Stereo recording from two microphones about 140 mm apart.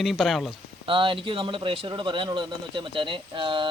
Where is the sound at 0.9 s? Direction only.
40° right (ahead or behind).